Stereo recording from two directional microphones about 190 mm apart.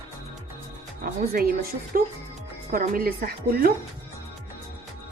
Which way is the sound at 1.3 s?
50° right (ahead or behind).